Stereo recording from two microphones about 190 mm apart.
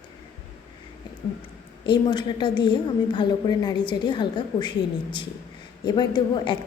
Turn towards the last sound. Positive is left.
turn(degrees=25)  # may be behind; listen again after turning